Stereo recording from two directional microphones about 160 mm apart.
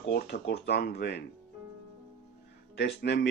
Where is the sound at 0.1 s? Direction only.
90° left.